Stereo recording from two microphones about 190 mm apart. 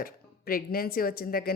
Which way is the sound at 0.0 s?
50° left (ahead or behind).